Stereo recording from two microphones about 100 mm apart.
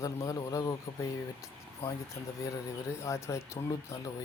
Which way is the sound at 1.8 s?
20° left (ahead or behind).